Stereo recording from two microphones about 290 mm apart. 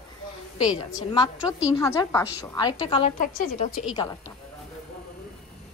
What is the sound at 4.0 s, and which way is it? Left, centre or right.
Speech, centre.